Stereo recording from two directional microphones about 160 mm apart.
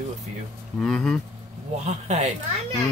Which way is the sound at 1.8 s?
45° right (ahead or behind).